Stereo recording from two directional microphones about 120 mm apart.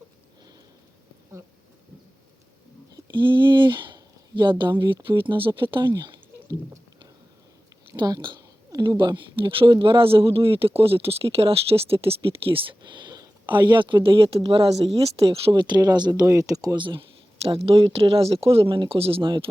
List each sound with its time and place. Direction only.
2.9 s speech: 40° right (ahead or behind)
5.9 s a sound: 35° right (ahead or behind)
7.9 s speech: 35° right (ahead or behind); by 15.6 s 50° right (ahead or behind)
15.6 s speech: 35° right (ahead or behind)